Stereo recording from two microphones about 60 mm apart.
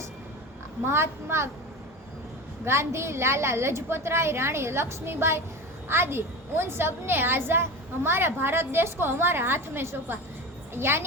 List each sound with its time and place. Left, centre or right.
0.9 s a woman's voice: right
2.6 s a woman's voice: right